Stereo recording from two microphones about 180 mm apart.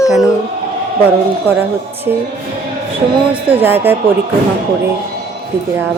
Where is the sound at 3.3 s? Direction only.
30° right (ahead or behind).